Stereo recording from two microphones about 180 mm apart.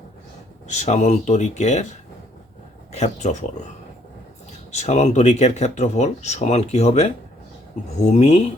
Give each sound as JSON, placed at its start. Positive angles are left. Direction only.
{"t": 0.7, "sound": "speech", "side_deg": 40}
{"t": 2.9, "sound": "speech", "side_deg": 35}
{"t": 4.7, "sound": "speech", "side_deg": 40}